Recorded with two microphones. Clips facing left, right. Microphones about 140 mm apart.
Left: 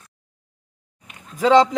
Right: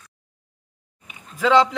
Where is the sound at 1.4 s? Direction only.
40° left (ahead or behind).